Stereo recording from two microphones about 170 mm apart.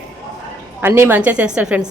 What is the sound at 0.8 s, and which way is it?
A woman's voice, 10° right (ahead or behind).